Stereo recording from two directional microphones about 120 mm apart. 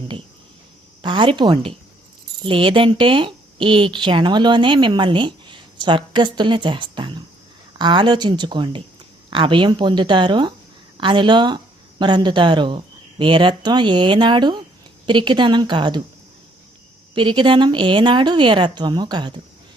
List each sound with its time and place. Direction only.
1.0 s a woman's voice: 40° right (ahead or behind)
17.2 s a woman's voice: 40° right (ahead or behind)